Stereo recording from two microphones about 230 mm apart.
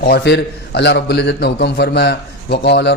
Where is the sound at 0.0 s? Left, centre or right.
Left.